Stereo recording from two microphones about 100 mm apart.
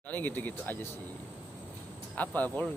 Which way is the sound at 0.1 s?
20° left (ahead or behind).